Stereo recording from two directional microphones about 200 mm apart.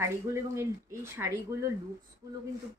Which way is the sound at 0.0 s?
15° right (ahead or behind).